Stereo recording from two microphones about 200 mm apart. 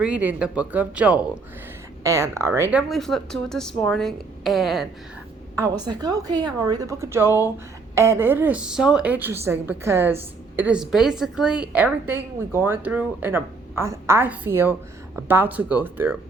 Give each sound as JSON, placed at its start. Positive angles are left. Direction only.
{"t": 0.0, "sound": "a woman's voice", "side_deg": -5}
{"t": 5.5, "sound": "a woman's voice", "side_deg": -20}